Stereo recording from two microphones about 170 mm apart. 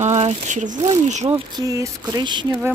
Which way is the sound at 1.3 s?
20° right (ahead or behind).